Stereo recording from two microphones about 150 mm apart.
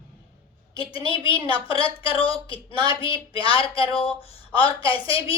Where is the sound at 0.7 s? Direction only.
35° left (ahead or behind).